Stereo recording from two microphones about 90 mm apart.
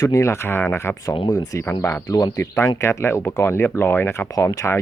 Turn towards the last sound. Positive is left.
turn(degrees=35)  # may be behind; listen again after turning